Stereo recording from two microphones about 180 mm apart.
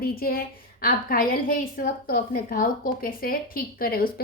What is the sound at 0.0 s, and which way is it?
A woman's voice, 55° left (ahead or behind).